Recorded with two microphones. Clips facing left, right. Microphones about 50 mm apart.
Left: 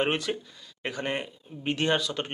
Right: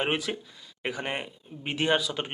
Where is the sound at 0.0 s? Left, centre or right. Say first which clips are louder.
Left 1 dB; centre.